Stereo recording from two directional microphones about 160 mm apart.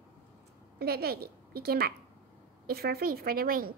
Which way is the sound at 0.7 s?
75° right (ahead or behind).